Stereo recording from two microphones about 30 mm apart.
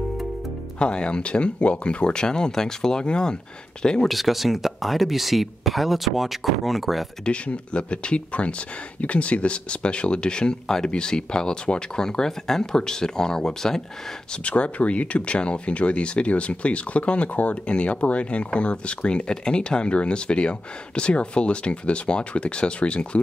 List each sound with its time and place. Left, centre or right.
0.7 s speech: left
4.1 s speech: centre
7.4 s speech: left; by 13.8 s centre
14.3 s speech: left
17.6 s speech: left
19.2 s speech: left